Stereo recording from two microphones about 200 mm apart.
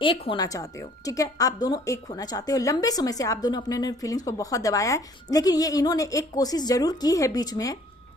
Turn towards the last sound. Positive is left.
turn(degrees=20)  # may be behind; listen again after turning